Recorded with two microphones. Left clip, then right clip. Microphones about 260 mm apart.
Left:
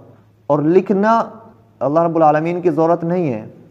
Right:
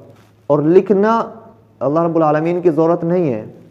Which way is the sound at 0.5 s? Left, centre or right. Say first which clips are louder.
Right 2 dB; left.